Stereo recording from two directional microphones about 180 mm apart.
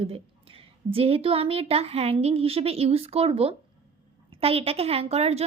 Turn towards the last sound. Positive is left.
turn(degrees=-35)  # may be behind; listen again after turning